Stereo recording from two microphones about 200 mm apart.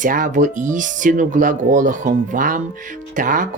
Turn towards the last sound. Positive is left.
turn(degrees=-40)  # may be behind; listen again after turning